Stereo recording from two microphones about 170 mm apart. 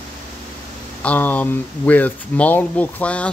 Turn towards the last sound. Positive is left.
turn(degrees=10)  # may be behind; listen again after turning